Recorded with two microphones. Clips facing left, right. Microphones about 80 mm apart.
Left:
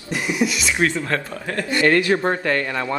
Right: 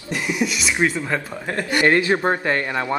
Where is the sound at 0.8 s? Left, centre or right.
Centre.